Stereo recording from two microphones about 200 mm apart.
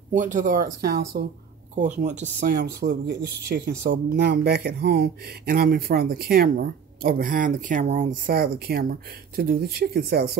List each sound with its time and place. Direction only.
0.1 s speech: 40° right (ahead or behind)
1.8 s speech: 35° right (ahead or behind); by 10.3 s 50° right (ahead or behind)